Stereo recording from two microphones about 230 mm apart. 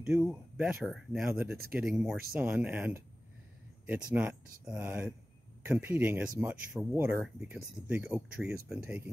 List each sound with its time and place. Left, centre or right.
0.0 s speech: centre